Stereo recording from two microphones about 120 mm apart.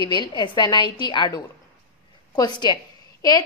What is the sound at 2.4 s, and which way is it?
Speech, 35° left (ahead or behind).